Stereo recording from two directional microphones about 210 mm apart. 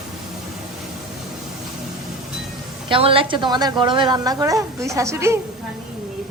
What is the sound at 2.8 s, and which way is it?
A woman's voice, 25° right (ahead or behind).